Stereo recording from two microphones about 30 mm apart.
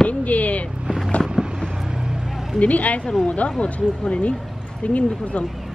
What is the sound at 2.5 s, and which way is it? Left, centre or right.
Speech, left.